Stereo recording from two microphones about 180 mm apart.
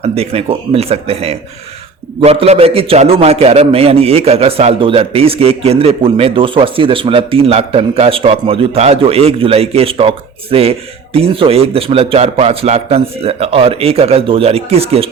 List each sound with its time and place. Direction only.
0.0 s a man's voice: 35° right (ahead or behind)